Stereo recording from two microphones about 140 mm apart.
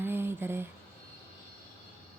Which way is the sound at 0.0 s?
15° right (ahead or behind).